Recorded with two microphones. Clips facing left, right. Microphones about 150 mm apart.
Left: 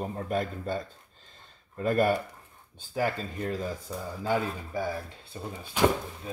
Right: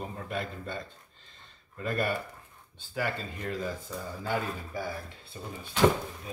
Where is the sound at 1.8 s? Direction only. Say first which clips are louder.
Left 6 dB; 40° left (ahead or behind).